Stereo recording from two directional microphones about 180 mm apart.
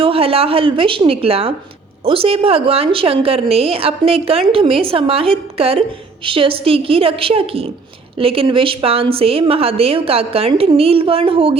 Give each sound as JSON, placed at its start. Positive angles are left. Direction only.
{"t": 0.0, "sound": "a woman's voice", "side_deg": -30}